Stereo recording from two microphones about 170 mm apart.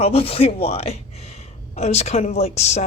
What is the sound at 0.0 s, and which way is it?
Speech, 35° left (ahead or behind).